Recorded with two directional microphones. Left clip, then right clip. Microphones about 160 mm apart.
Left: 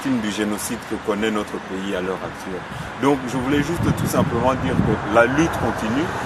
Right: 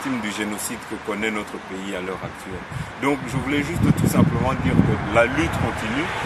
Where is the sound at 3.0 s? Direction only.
Centre (ahead or behind).